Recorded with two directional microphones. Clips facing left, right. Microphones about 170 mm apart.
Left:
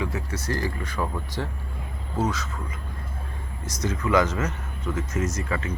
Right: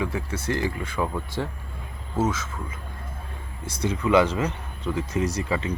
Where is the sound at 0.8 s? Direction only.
10° right (ahead or behind).